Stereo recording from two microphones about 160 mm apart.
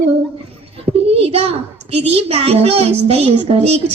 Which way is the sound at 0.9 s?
40° right (ahead or behind).